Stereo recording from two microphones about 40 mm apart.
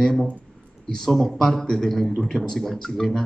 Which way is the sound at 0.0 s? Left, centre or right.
Centre.